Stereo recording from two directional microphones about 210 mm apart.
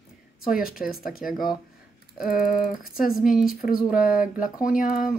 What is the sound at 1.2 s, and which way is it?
Speech, 5° right (ahead or behind).